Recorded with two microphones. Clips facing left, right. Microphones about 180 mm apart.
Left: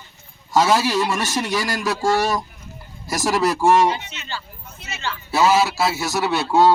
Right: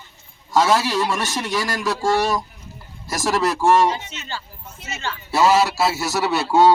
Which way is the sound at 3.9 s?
45° right (ahead or behind).